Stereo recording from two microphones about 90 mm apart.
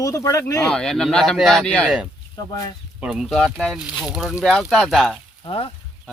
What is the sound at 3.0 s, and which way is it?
Speech, 15° right (ahead or behind).